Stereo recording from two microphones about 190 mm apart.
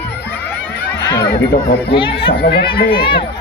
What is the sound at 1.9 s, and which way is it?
Speech, 25° left (ahead or behind).